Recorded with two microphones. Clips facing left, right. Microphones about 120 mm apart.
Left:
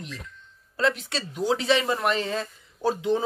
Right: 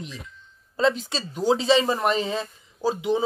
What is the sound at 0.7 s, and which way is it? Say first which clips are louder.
Speech: right 3 dB; 30° right (ahead or behind).